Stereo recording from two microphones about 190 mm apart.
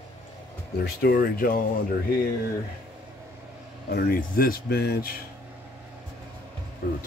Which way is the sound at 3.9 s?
50° left (ahead or behind).